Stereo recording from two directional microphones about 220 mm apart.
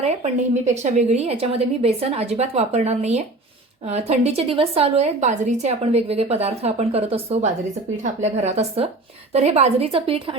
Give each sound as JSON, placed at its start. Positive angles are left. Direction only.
{"t": 0.0, "sound": "a woman's voice", "side_deg": -30}